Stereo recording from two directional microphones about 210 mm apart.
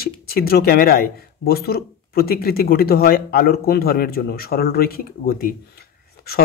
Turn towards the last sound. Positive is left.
turn(degrees=45)  # may be behind; listen again after turning